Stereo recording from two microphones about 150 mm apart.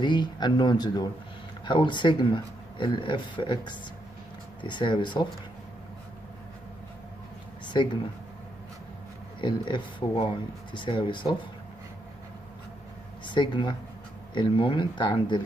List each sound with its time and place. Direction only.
0.0 s speech: 30° left (ahead or behind)
7.6 s speech: 30° left (ahead or behind)
9.4 s speech: 30° left (ahead or behind)
13.3 s speech: 30° left (ahead or behind)